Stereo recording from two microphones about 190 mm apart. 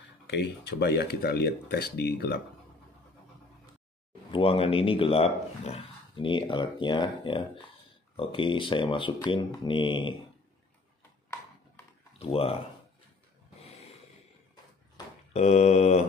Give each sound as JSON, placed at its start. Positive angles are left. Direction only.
{"t": 0.3, "sound": "speech", "side_deg": 65}
{"t": 4.3, "sound": "speech", "side_deg": 30}
{"t": 12.2, "sound": "mantra", "side_deg": 30}
{"t": 15.3, "sound": "mantra", "side_deg": 35}